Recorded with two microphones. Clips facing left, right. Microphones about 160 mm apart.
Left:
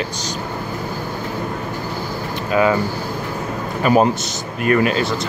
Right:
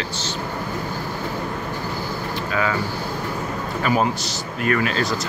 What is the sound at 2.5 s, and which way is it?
Speech, 20° left (ahead or behind).